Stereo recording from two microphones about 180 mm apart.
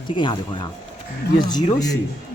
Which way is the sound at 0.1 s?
25° left (ahead or behind).